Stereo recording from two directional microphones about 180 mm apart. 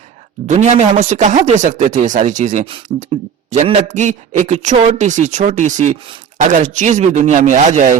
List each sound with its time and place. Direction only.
0.4 s a man's voice: 40° right (ahead or behind)